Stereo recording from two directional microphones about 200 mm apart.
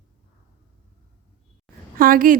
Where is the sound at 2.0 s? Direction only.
45° right (ahead or behind).